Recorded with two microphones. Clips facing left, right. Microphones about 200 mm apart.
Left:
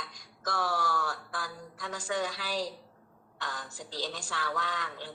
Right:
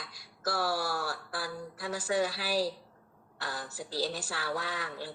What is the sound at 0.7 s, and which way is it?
Speech, 35° right (ahead or behind).